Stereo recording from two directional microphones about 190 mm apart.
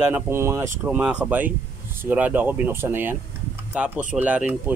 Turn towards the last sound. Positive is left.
turn(degrees=-10)  # may be behind; listen again after turning